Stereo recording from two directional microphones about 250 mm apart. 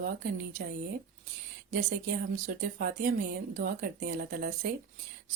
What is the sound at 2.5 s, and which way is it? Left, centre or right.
Speech, right.